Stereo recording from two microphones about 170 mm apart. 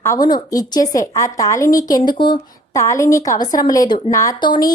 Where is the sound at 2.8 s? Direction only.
15° left (ahead or behind).